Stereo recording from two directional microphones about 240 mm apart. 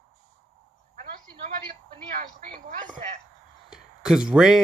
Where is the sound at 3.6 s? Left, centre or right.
Centre.